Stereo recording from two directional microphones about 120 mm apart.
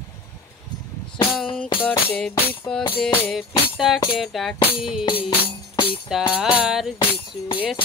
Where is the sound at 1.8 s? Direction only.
10° left (ahead or behind).